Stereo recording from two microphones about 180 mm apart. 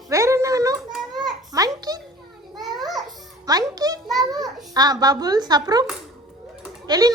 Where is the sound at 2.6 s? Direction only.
Centre (ahead or behind).